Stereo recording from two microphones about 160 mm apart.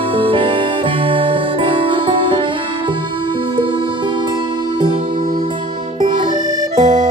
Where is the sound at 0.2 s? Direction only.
35° right (ahead or behind).